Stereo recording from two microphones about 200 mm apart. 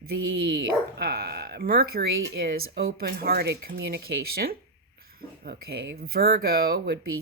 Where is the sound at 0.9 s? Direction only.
50° right (ahead or behind).